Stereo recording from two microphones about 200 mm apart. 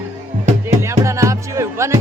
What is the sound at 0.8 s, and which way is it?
Speech, 15° right (ahead or behind).